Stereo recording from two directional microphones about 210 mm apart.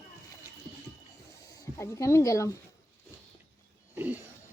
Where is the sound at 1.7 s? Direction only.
15° left (ahead or behind).